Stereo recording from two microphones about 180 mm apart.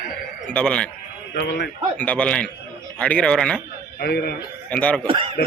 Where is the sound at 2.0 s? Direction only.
5° left (ahead or behind).